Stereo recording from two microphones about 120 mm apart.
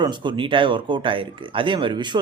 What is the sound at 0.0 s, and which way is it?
Speech, 40° right (ahead or behind).